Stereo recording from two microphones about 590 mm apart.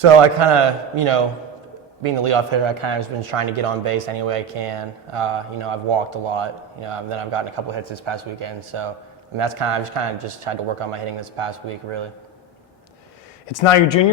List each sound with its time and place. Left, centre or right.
0.0 s speech: right
13.5 s a man's voice: left